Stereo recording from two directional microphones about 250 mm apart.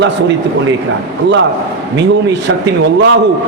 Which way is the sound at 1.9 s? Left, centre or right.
Right.